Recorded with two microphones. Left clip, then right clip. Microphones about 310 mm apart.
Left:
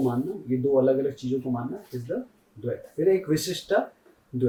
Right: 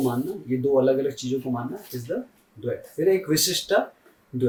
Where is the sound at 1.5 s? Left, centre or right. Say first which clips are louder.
Right 1 dB; centre.